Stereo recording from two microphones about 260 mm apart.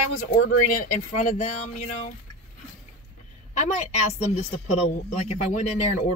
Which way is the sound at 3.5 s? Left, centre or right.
Left.